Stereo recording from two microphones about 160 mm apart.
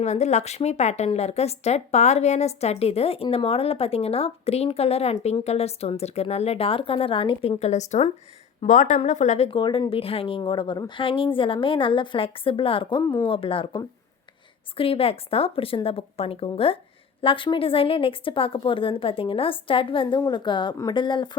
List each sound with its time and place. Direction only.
0.0 s speech: 45° left (ahead or behind)
9.5 s speech: 30° left (ahead or behind)